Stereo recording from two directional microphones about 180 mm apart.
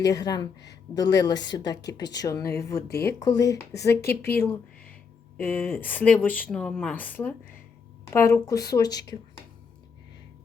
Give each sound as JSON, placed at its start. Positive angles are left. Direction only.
{"t": 0.1, "sound": "speech", "side_deg": 20}